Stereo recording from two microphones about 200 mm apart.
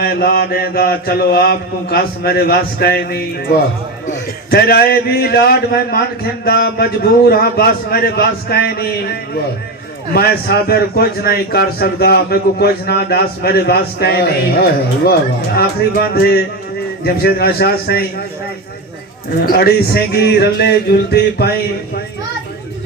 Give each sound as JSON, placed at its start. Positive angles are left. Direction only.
{"t": 0.0, "sound": "a man's voice", "side_deg": 50}
{"t": 4.5, "sound": "a man's voice", "side_deg": 50}
{"t": 10.2, "sound": "a man's voice", "side_deg": 50}
{"t": 19.5, "sound": "a man's voice", "side_deg": 50}